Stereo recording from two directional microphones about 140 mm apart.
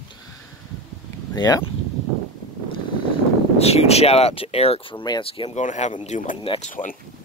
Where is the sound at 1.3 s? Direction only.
25° left (ahead or behind).